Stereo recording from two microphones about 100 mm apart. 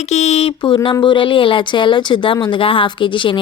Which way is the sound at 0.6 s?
55° left (ahead or behind).